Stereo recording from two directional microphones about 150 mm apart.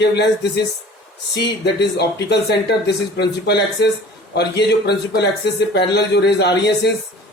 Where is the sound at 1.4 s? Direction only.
90° left.